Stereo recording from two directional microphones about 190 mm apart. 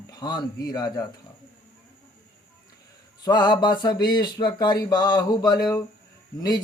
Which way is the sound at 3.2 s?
20° left (ahead or behind).